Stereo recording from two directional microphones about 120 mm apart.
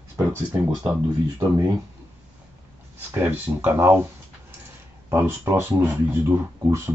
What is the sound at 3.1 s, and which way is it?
Speech, 20° right (ahead or behind).